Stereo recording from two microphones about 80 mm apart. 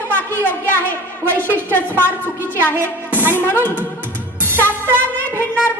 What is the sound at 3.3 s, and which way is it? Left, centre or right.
Speech, left.